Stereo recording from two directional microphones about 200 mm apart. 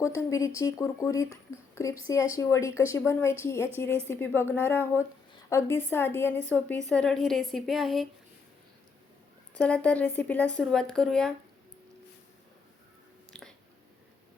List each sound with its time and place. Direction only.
0.0 s speech: 15° left (ahead or behind)
9.6 s speech: 5° left (ahead or behind)